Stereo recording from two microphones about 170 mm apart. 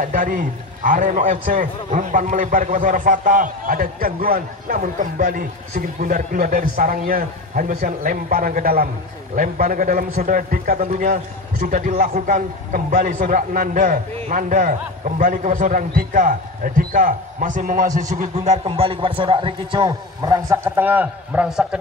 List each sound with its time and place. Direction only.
0.0 s a man's voice: 50° right (ahead or behind); by 21.6 s 5° right (ahead or behind)